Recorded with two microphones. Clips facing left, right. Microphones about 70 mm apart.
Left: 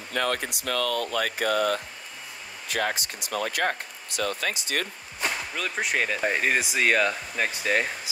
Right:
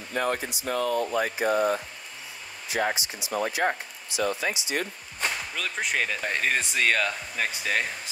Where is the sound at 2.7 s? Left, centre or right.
Left.